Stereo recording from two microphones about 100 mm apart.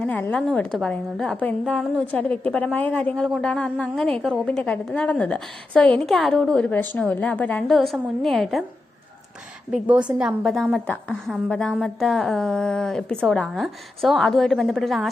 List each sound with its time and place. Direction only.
0.0 s a woman's voice: 15° left (ahead or behind)
7.7 s a woman's voice: centre (ahead or behind)
9.7 s a woman's voice: 10° right (ahead or behind)